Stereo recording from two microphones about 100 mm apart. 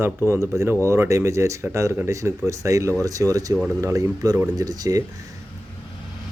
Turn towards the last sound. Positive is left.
turn(degrees=-35)  # may be behind; listen again after turning